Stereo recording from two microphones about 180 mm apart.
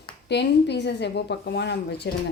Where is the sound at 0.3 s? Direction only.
70° left (ahead or behind).